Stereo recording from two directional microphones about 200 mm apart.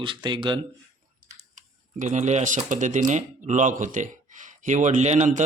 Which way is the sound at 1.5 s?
35° right (ahead or behind).